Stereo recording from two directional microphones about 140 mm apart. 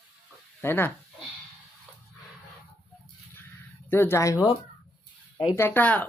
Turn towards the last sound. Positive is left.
turn(degrees=10)  # may be behind; listen again after turning